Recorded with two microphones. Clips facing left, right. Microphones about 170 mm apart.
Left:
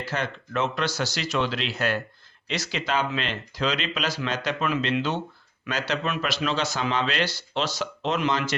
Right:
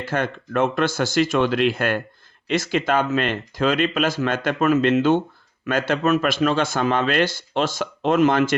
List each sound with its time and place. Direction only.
0.0 s speech: 50° right (ahead or behind)